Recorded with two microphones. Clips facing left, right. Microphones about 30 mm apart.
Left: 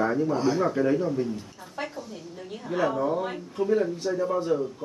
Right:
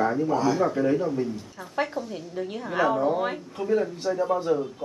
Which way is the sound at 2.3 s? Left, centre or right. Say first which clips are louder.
Right 3 dB; right.